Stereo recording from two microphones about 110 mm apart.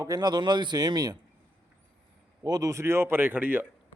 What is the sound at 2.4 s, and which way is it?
Speech, 35° right (ahead or behind).